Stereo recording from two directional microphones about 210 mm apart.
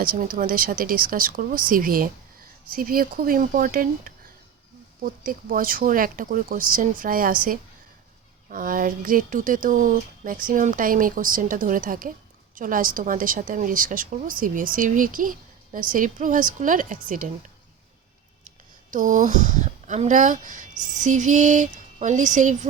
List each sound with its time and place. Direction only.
0.0 s a woman's voice: 40° right (ahead or behind)
18.9 s a woman's voice: 40° right (ahead or behind)